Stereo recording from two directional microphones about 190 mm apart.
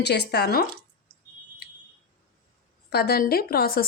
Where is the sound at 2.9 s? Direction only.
55° left (ahead or behind).